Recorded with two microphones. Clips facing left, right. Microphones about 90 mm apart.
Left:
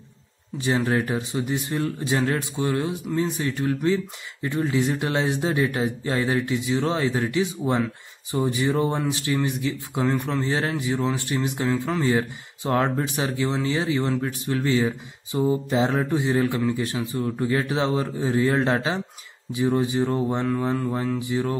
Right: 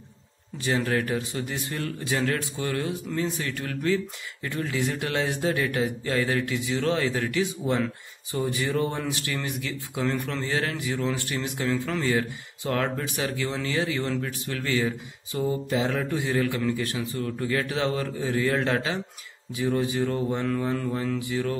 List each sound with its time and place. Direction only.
0.6 s a man's voice: 20° left (ahead or behind)